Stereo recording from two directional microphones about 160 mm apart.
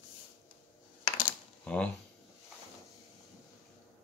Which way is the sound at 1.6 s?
10° left (ahead or behind).